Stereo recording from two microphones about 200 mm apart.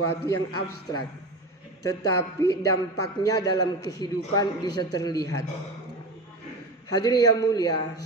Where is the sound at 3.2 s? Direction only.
20° left (ahead or behind).